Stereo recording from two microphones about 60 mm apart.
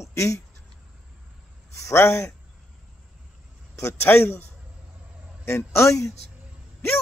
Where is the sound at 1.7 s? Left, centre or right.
Left.